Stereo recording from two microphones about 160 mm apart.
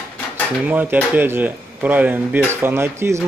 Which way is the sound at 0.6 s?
10° right (ahead or behind).